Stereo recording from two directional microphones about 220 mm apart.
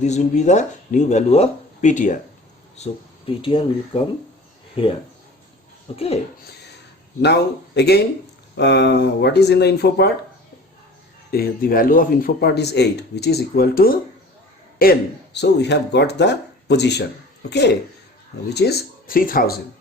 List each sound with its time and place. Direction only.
0.0 s speech: 30° left (ahead or behind)
5.9 s speech: 25° left (ahead or behind)
7.2 s speech: 50° left (ahead or behind)
11.3 s speech: 40° left (ahead or behind)
18.5 s speech: 45° left (ahead or behind)